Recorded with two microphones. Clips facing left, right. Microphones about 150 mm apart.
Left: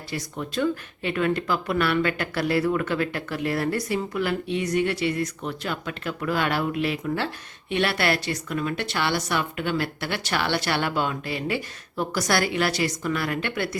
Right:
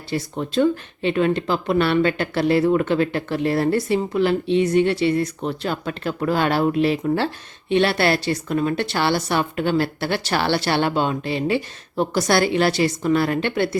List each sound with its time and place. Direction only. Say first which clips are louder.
0.1 s speech: right 7 dB; 30° right (ahead or behind)